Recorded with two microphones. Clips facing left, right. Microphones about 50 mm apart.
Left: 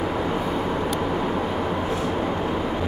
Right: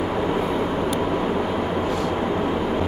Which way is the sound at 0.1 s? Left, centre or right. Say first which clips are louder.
Right 2 dB; centre.